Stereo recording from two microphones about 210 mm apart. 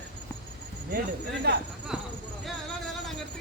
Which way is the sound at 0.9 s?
50° right (ahead or behind).